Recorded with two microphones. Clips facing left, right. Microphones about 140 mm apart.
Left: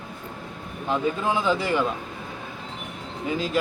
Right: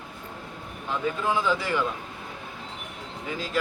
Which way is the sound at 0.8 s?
20° left (ahead or behind).